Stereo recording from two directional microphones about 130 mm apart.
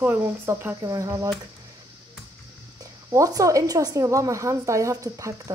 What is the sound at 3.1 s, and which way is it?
A woman's voice, 25° right (ahead or behind).